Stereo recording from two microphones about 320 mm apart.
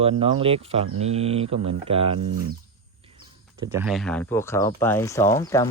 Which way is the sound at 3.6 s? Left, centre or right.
Centre.